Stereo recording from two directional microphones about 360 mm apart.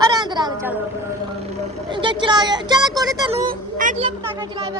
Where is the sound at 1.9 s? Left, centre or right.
Centre.